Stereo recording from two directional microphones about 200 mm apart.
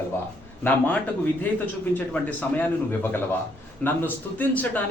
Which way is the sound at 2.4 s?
10° left (ahead or behind).